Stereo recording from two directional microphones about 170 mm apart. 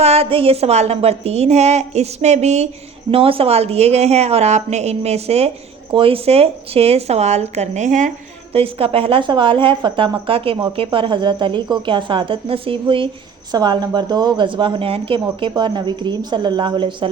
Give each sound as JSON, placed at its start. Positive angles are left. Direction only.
{"t": 0.0, "sound": "a woman's voice", "side_deg": -35}
{"t": 8.5, "sound": "a woman's voice", "side_deg": -35}